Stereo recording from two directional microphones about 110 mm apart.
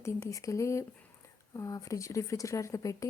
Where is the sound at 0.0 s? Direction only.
30° left (ahead or behind).